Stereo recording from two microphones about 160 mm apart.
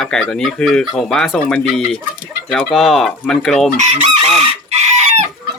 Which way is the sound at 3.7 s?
45° right (ahead or behind).